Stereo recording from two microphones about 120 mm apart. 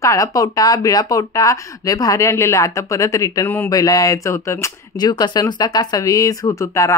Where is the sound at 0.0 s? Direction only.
25° left (ahead or behind).